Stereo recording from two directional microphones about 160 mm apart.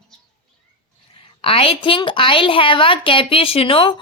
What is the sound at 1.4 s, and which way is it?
A woman's voice, 35° left (ahead or behind).